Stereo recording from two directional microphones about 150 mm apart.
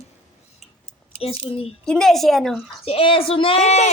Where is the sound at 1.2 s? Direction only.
40° left (ahead or behind).